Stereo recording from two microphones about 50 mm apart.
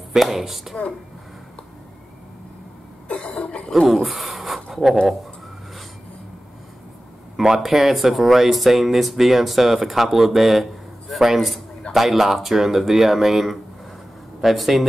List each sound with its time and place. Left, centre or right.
0.1 s speech: centre
3.1 s cough: left
3.8 s speech: centre
7.3 s speech: centre